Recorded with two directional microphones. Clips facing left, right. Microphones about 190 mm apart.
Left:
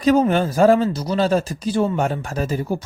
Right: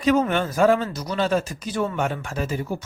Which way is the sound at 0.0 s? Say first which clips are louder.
Left 4 dB; 35° left (ahead or behind).